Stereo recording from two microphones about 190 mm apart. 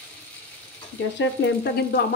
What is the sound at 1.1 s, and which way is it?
Speech, 65° left (ahead or behind).